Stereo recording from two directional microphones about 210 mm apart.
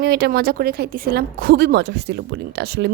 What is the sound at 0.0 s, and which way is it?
Speech, 50° right (ahead or behind).